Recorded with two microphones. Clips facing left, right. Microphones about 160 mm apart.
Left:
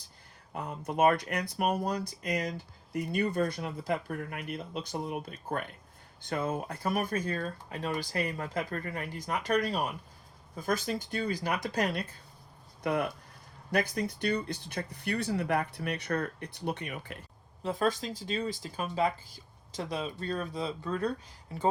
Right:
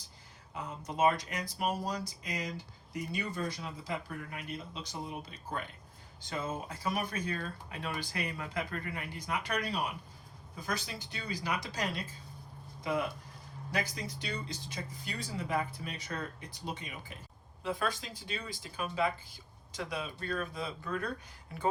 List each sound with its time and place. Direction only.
0.5 s speech: 60° left (ahead or behind)
17.6 s speech: 40° left (ahead or behind)